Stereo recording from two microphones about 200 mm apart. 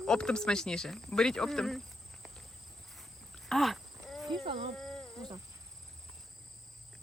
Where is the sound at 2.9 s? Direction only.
Centre (ahead or behind).